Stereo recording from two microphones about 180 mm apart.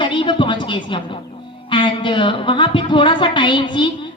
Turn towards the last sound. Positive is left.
turn(degrees=25)  # may be behind; listen again after turning